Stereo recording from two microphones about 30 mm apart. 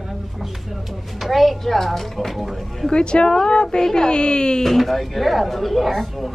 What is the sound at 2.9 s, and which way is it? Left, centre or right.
Speech, left.